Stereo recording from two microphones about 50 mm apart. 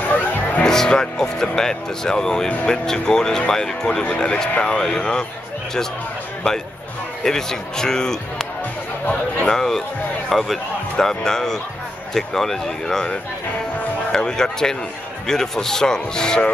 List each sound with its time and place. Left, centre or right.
0.1 s music: left
0.7 s speech: centre
7.2 s speech: centre
9.5 s speech: centre
14.1 s speech: centre